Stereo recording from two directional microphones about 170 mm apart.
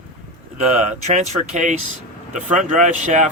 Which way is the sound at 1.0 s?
45° right (ahead or behind).